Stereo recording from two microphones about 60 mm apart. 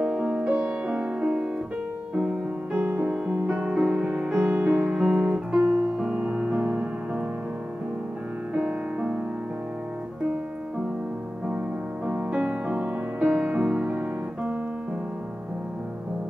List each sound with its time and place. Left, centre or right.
0.0 s music: centre
2.8 s music: right
8.5 s music: centre
12.1 s music: centre